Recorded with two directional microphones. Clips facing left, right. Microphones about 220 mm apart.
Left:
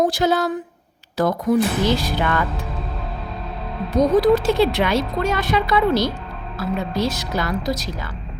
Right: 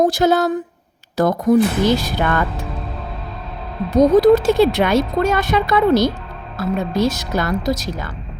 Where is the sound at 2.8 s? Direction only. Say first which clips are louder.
Even; centre (ahead or behind).